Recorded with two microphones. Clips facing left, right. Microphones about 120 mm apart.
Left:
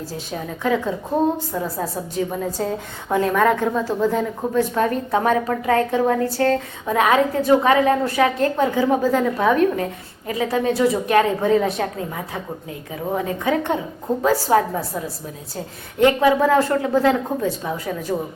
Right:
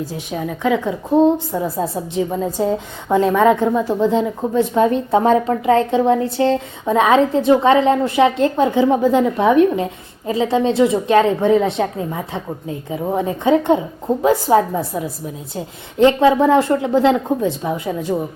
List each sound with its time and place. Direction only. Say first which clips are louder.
0.1 s a woman's voice: right 4 dB; 15° right (ahead or behind)